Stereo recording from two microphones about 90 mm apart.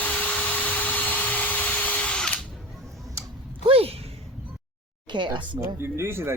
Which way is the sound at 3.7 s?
90° right.